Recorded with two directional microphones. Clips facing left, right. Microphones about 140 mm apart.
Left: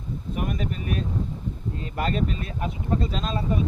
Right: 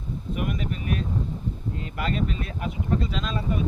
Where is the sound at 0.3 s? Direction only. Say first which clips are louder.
Left 1 dB; 40° left (ahead or behind).